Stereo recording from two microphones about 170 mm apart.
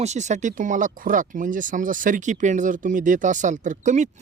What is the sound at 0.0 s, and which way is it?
Speech, 40° right (ahead or behind).